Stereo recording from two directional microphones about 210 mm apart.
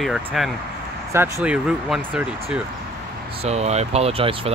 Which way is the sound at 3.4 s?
30° right (ahead or behind).